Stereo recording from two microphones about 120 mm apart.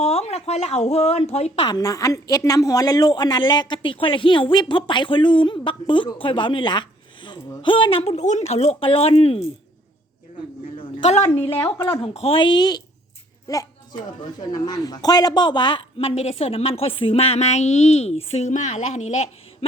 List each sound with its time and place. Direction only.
0.0 s speech: 65° left (ahead or behind)
1.6 s a woman's voice: 30° left (ahead or behind); by 8.1 s 50° left (ahead or behind)
8.1 s speech: 75° left (ahead or behind); by 9.5 s 55° left (ahead or behind)
10.8 s a sound: 65° left (ahead or behind)
11.5 s speech: 20° left (ahead or behind)
11.9 s speech: 55° left (ahead or behind); by 19.3 s 70° left (ahead or behind)